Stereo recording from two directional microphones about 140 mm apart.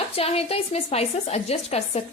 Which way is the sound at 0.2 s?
45° left (ahead or behind).